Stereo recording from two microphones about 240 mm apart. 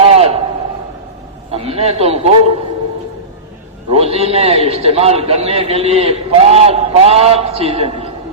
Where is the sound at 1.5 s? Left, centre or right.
Right.